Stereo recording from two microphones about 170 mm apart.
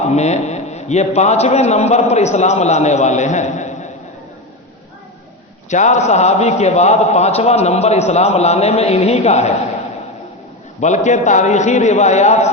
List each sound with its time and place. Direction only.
0.0 s a man's voice: 40° left (ahead or behind)
5.7 s a man's voice: 45° left (ahead or behind)
10.8 s a man's voice: 45° left (ahead or behind)